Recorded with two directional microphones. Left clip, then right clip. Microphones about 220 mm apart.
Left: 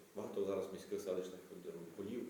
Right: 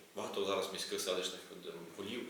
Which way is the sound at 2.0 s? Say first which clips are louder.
Right 3 dB; 5° left (ahead or behind).